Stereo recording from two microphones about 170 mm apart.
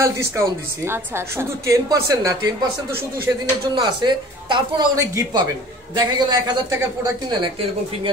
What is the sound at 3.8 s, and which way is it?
Speech, 30° right (ahead or behind).